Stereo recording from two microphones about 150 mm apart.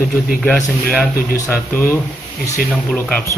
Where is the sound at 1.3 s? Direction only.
15° left (ahead or behind).